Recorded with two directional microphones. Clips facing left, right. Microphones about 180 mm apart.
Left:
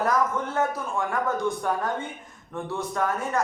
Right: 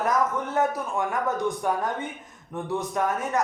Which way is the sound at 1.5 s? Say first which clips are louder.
Even; 15° right (ahead or behind).